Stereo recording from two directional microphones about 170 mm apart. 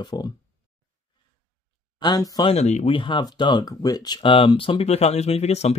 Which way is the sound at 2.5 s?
40° left (ahead or behind).